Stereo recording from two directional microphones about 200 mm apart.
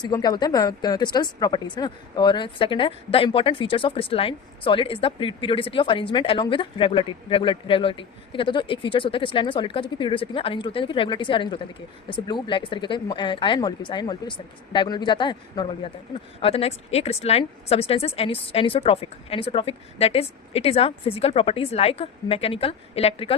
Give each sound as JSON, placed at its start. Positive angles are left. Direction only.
{"t": 0.0, "sound": "speech", "side_deg": 20}